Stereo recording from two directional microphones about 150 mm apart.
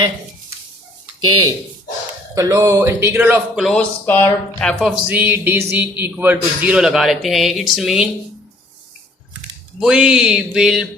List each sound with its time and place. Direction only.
1.2 s speech: 30° right (ahead or behind); by 3.7 s 10° right (ahead or behind)
3.7 s speech: 10° left (ahead or behind)
4.8 s a man's voice: 10° right (ahead or behind)
9.8 s a man's voice: 5° right (ahead or behind)